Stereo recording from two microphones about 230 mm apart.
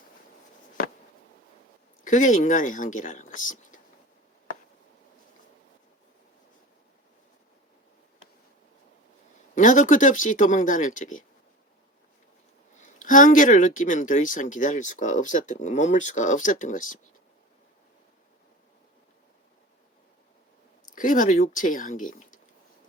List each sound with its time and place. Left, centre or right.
2.0 s speech: left
9.6 s speech: left
12.7 s speech: left
20.8 s speech: left